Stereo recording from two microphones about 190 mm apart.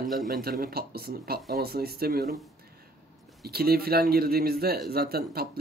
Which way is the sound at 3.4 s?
55° right (ahead or behind).